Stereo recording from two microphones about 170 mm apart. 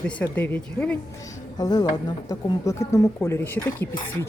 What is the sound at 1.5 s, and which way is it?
A woman's voice, 25° left (ahead or behind).